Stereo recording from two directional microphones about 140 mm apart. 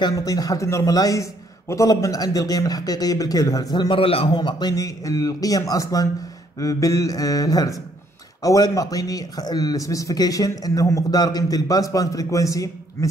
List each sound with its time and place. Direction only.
0.0 s a man's voice: 25° left (ahead or behind)